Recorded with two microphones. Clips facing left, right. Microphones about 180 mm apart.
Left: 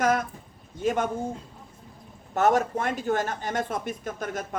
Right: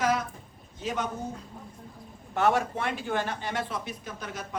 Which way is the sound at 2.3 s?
45° left (ahead or behind).